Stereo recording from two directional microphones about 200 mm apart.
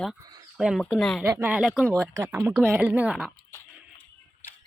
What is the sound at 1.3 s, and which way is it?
Speech, 10° right (ahead or behind).